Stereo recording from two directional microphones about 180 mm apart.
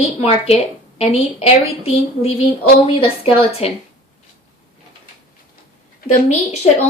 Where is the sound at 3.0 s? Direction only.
30° left (ahead or behind).